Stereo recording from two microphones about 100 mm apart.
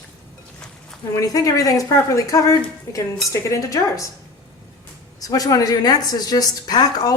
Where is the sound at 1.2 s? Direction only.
35° left (ahead or behind).